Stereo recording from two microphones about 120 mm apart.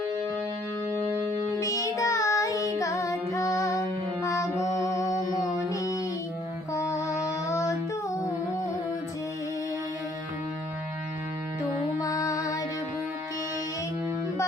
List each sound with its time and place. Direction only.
1.5 s child singing: 30° left (ahead or behind)
5.1 s music: 30° left (ahead or behind)
6.7 s mantra: 25° left (ahead or behind)
7.5 s child singing: 25° left (ahead or behind)
11.9 s music: 30° left (ahead or behind)